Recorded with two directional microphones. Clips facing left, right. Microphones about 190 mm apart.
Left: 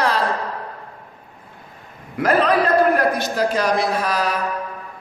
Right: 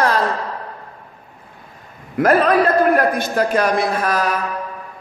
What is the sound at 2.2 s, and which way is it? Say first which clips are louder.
A man's voice: right 3 dB; 50° right (ahead or behind).